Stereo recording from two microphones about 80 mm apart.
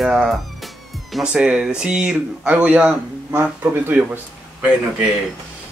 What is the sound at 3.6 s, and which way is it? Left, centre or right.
Speech, right.